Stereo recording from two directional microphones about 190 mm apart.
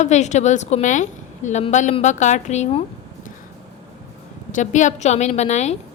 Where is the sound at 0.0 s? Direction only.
40° left (ahead or behind).